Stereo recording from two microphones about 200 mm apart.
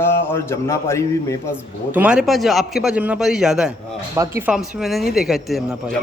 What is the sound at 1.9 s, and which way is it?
Speech, 5° right (ahead or behind).